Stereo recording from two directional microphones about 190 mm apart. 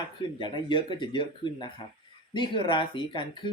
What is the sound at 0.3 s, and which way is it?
A man's voice, 25° left (ahead or behind).